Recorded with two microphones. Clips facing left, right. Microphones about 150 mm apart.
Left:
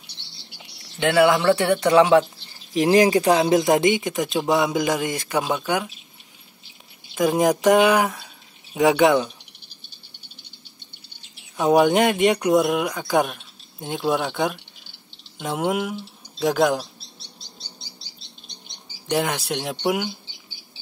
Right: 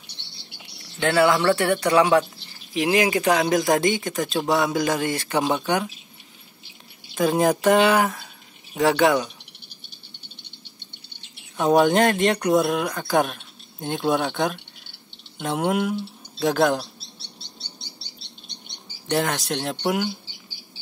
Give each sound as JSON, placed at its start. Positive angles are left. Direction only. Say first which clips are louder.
{"t": 0.9, "sound": "speech", "louder": "left 2 dB", "side_deg": 15}
{"t": 2.7, "sound": "speech", "louder": "left 4 dB", "side_deg": 35}
{"t": 7.2, "sound": "speech", "louder": "left 1 dB", "side_deg": 10}
{"t": 11.5, "sound": "speech", "louder": "left 1 dB", "side_deg": 10}
{"t": 19.0, "sound": "speech", "louder": "even", "side_deg": 10}